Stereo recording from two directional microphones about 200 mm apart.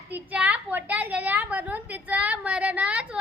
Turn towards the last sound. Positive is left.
turn(degrees=-5)  # may be behind; listen again after turning